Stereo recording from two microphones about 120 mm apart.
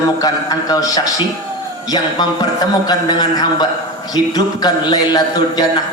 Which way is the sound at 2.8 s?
35° left (ahead or behind).